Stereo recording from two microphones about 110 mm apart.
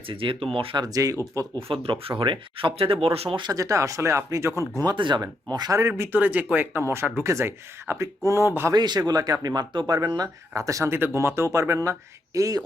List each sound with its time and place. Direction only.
0.1 s speech: 55° right (ahead or behind)
0.9 s speech: 30° right (ahead or behind)
1.1 s speech: 25° left (ahead or behind)
1.6 s speech: 60° right (ahead or behind)
3.3 s speech: 35° right (ahead or behind)
4.8 s speech: 40° right (ahead or behind)
6.0 s speech: 15° right (ahead or behind)
8.7 s speech: 40° right (ahead or behind)